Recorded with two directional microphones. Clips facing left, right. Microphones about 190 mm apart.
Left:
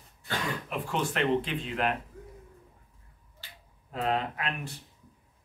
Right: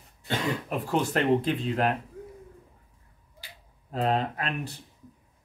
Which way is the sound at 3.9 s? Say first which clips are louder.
Right 3 dB; 35° right (ahead or behind).